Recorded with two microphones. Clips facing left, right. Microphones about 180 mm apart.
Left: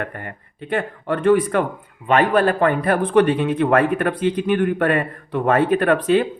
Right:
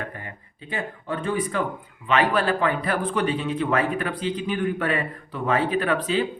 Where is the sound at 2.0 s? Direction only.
50° left (ahead or behind).